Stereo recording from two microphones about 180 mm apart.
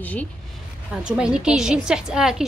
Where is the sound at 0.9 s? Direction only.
5° right (ahead or behind).